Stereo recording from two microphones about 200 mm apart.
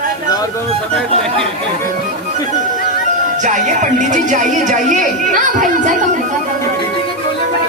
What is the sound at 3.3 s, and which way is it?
Speech, 40° right (ahead or behind).